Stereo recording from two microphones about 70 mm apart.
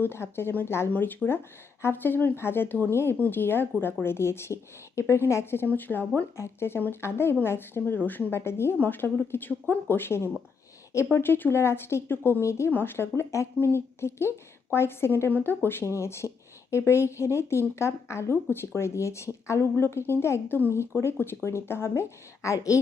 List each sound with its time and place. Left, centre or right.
0.0 s speech: left
6.3 s speech: left
8.4 s speech: left
12.4 s speech: left
12.7 s speech: left
22.4 s speech: left